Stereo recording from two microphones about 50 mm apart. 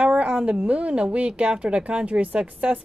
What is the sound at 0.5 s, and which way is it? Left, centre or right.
Speech, right.